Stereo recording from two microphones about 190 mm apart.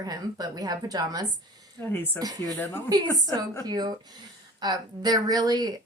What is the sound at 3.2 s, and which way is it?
Speech, 15° left (ahead or behind).